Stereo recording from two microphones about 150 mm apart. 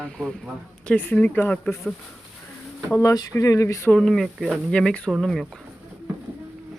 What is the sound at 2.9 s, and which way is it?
Speech, 20° left (ahead or behind).